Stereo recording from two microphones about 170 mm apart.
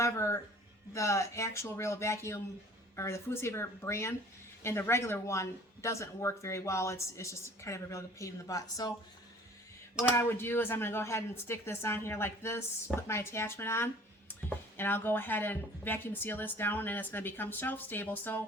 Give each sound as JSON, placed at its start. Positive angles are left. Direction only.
{"t": 0.0, "sound": "a sound", "side_deg": 15}
{"t": 0.9, "sound": "speech", "side_deg": 15}
{"t": 10.0, "sound": "speech", "side_deg": 15}